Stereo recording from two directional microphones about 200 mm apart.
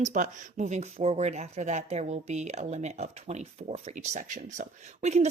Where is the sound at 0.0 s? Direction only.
40° right (ahead or behind).